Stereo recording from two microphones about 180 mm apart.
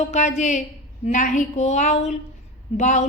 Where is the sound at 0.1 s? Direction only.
40° left (ahead or behind).